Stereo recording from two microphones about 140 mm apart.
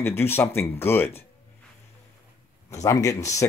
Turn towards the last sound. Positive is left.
turn(degrees=20)  # may be behind; listen again after turning